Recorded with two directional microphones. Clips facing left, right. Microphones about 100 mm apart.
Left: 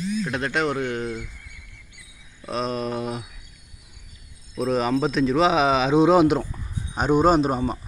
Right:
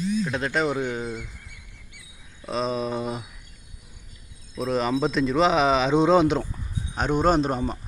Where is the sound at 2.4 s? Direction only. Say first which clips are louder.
Even; 5° left (ahead or behind).